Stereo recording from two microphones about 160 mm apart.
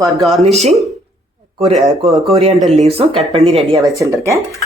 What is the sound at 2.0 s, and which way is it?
Speech, centre (ahead or behind).